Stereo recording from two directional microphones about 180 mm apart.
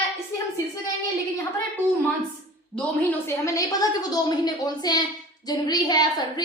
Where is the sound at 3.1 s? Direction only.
15° left (ahead or behind).